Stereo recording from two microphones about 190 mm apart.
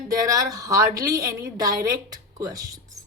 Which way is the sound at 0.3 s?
20° right (ahead or behind).